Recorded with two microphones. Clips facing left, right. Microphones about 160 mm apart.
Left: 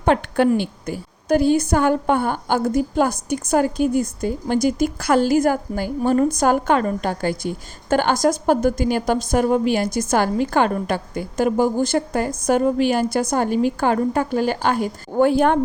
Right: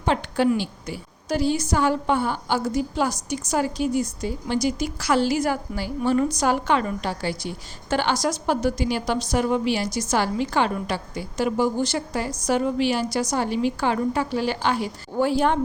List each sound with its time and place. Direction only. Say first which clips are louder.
0.0 s a woman's voice: left 4 dB; 55° left (ahead or behind)